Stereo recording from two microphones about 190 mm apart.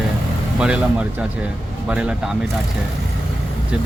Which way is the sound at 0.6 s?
5° right (ahead or behind).